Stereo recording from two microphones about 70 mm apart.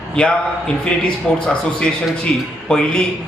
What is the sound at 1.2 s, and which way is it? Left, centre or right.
A man's voice, centre.